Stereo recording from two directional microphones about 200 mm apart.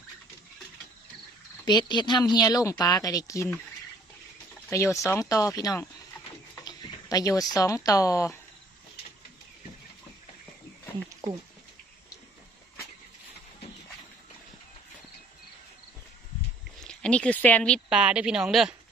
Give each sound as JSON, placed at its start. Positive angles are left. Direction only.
{"t": 1.6, "sound": "speech", "side_deg": 20}
{"t": 5.0, "sound": "speech", "side_deg": 15}
{"t": 16.8, "sound": "speech", "side_deg": 5}